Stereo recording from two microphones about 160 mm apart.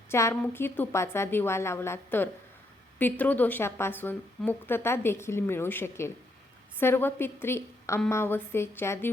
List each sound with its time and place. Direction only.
0.1 s a woman's voice: 15° left (ahead or behind)